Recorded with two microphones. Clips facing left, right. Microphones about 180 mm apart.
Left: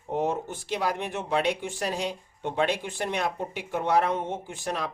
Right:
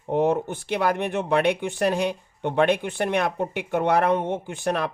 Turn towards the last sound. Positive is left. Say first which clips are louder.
# right 6 dB
turn(degrees=-60)  # may be behind; listen again after turning